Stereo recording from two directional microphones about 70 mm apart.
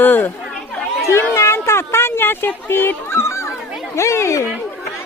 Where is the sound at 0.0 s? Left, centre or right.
Left.